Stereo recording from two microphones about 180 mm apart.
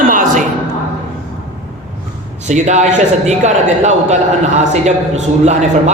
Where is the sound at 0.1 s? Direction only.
50° right (ahead or behind).